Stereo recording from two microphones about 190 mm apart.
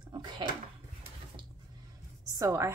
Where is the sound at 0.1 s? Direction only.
25° right (ahead or behind).